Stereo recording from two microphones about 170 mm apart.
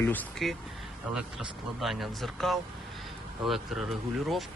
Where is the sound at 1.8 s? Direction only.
Centre (ahead or behind).